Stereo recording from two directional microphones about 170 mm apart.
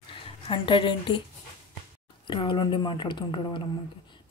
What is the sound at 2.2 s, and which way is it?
Speech, 30° left (ahead or behind).